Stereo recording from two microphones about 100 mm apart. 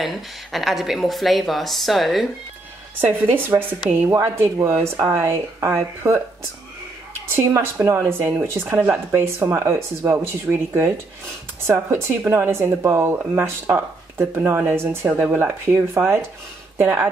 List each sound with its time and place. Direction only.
0.0 s speech: centre (ahead or behind)
3.0 s speech: 20° right (ahead or behind)
4.1 s speech: 30° right (ahead or behind)
7.3 s speech: 25° right (ahead or behind)